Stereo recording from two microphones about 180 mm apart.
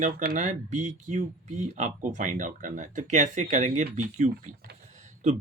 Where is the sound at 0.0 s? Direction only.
55° right (ahead or behind).